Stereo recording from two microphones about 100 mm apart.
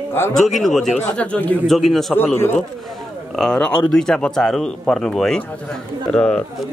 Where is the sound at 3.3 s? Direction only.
5° left (ahead or behind).